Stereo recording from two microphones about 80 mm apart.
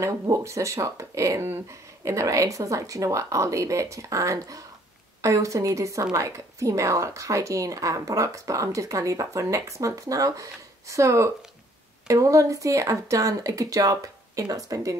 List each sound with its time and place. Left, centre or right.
0.0 s a woman's voice: right